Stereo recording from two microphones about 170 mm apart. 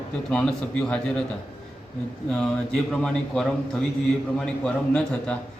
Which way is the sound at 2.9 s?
5° left (ahead or behind).